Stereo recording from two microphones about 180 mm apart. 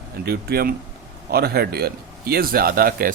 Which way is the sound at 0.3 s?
60° right (ahead or behind).